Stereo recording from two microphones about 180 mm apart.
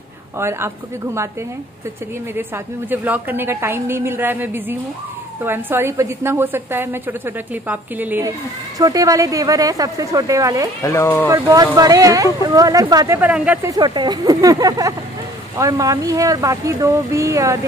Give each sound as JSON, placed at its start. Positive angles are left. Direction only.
{"t": 0.4, "sound": "a woman's voice", "side_deg": -15}
{"t": 2.3, "sound": "a woman's voice", "side_deg": -10}
{"t": 10.8, "sound": "speech", "side_deg": 15}
{"t": 11.2, "sound": "speech", "side_deg": -20}
{"t": 13.2, "sound": "a woman's voice", "side_deg": -5}
{"t": 13.7, "sound": "a woman's voice", "side_deg": -25}